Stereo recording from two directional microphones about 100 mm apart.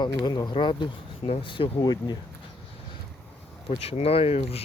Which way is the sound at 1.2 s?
70° left (ahead or behind).